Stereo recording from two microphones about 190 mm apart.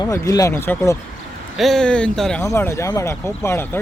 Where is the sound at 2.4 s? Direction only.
15° left (ahead or behind).